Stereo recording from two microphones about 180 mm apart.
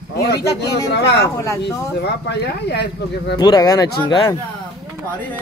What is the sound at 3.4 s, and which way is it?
Speech, 20° left (ahead or behind).